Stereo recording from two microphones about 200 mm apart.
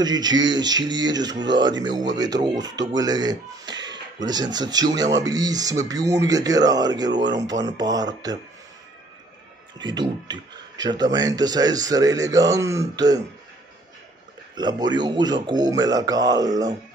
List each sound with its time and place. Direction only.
0.0 s speech: 20° right (ahead or behind)
9.8 s speech: 20° right (ahead or behind)
14.5 s speech: 20° right (ahead or behind)